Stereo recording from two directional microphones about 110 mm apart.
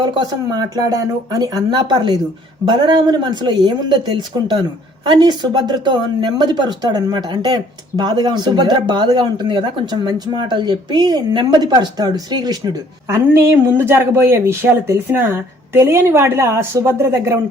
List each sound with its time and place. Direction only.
0.1 s speech: 35° right (ahead or behind)